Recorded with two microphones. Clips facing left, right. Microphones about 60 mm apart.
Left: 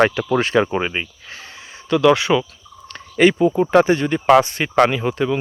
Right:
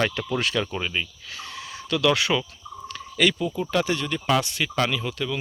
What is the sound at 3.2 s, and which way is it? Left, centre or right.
Speech, left.